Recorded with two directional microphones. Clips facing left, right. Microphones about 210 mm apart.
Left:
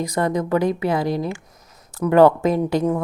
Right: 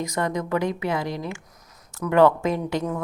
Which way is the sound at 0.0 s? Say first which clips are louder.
Left 5 dB; 35° left (ahead or behind).